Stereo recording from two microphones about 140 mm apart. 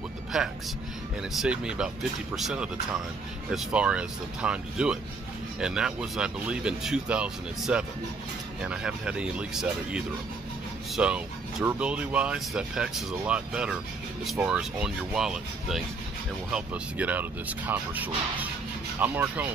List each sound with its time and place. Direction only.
0.3 s speech: 5° right (ahead or behind)